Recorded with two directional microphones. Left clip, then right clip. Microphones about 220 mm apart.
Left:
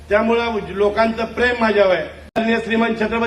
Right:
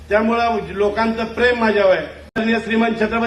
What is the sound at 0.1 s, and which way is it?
A man's voice, 15° left (ahead or behind).